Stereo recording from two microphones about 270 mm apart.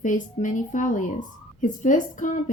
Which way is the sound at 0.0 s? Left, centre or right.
Left.